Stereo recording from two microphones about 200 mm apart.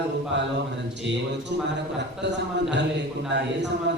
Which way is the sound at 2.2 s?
60° right (ahead or behind).